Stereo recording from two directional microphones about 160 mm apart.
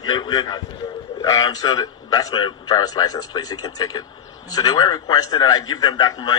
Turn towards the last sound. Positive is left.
turn(degrees=25)  # may be behind; listen again after turning